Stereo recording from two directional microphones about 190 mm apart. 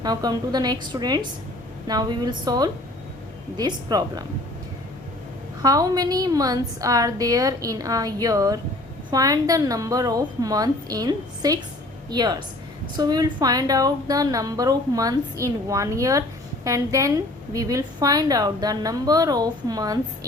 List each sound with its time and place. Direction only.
0.0 s a woman's voice: 20° right (ahead or behind)
5.6 s a woman's voice: 20° right (ahead or behind)